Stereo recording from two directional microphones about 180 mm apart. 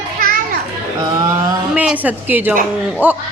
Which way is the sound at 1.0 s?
20° right (ahead or behind).